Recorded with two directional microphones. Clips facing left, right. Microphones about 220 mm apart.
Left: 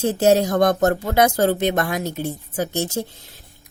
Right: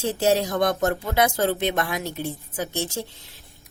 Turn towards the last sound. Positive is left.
turn(degrees=45)  # may be behind; listen again after turning